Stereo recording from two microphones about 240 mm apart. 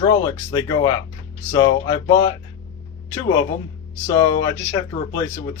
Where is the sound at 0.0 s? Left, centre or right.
Centre.